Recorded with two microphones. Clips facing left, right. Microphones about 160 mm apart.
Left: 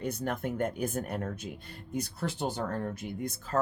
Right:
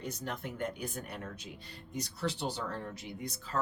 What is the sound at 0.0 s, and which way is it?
Speech, 55° left (ahead or behind).